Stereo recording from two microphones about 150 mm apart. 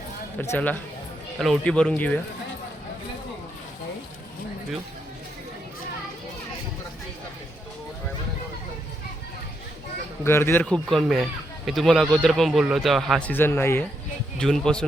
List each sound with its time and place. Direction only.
0.3 s speech: 15° left (ahead or behind)
10.2 s speech: 15° left (ahead or behind)
14.3 s speech: 5° left (ahead or behind)